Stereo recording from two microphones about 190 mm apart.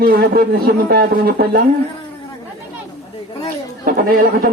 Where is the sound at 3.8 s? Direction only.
50° right (ahead or behind).